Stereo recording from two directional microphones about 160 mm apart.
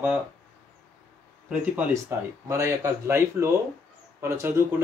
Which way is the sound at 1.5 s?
15° right (ahead or behind).